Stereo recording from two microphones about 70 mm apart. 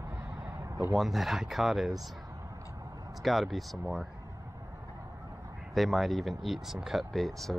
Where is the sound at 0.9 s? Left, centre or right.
Centre.